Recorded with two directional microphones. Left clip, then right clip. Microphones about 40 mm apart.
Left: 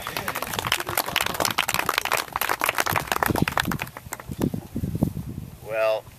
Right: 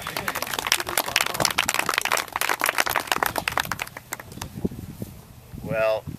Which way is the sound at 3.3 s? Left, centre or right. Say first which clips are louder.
Left 1 dB; left.